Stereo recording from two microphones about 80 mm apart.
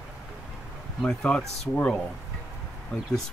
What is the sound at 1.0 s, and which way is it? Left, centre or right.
Speech, centre.